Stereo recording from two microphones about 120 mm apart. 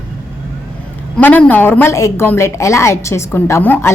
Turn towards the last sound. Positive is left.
turn(degrees=20)  # may be behind; listen again after turning